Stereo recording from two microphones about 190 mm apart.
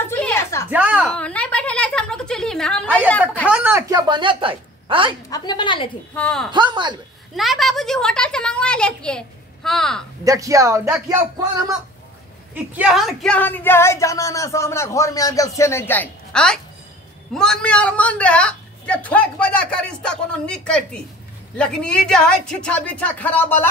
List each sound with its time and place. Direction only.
0.0 s a sound: 10° left (ahead or behind)
0.7 s a sound: 10° right (ahead or behind)
1.1 s a sound: 5° left (ahead or behind)
3.1 s speech: 10° left (ahead or behind)
3.4 s a woman's voice: 10° right (ahead or behind); by 5.1 s 25° right (ahead or behind)
5.3 s a woman's voice: 20° left (ahead or behind)
6.1 s a woman's voice: 5° left (ahead or behind)
6.5 s speech: 25° right (ahead or behind)
7.3 s a woman's voice: centre (ahead or behind)
10.2 s a woman's voice: 15° right (ahead or behind)
12.5 s a woman's voice: 5° right (ahead or behind); by 23.7 s 10° left (ahead or behind)